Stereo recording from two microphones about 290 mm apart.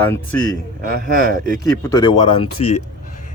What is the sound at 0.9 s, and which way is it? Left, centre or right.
Speech, right.